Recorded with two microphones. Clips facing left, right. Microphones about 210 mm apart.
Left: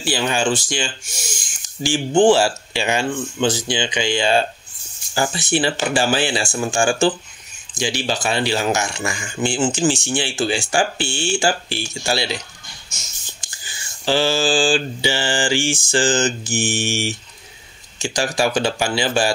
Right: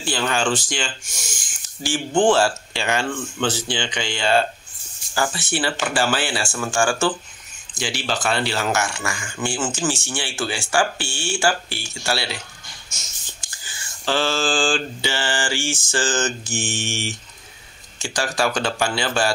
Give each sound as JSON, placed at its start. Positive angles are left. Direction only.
{"t": 0.0, "sound": "speech", "side_deg": 10}
{"t": 14.0, "sound": "speech", "side_deg": 10}